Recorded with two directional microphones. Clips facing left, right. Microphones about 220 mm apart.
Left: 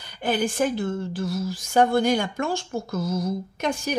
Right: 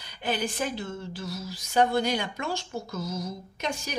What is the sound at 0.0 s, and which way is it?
Speech, 50° left (ahead or behind).